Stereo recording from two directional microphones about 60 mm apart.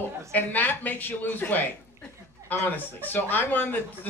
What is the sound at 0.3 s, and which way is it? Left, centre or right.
Speech, left.